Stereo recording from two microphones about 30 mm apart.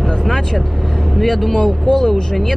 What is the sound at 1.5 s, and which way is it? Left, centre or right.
Speech, centre.